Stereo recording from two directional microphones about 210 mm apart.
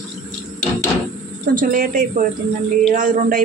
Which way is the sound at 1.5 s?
40° right (ahead or behind).